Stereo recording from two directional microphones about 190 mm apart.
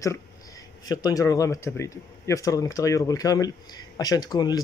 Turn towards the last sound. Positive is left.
turn(degrees=20)  # may be behind; listen again after turning